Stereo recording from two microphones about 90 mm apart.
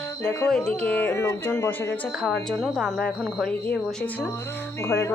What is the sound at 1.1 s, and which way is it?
Speech, 30° left (ahead or behind).